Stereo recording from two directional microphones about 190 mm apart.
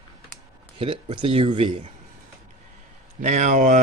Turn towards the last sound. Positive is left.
turn(degrees=-40)  # may be behind; listen again after turning